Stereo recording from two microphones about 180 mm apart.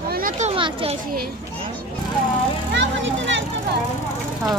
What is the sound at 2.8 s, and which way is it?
Music, 90° right.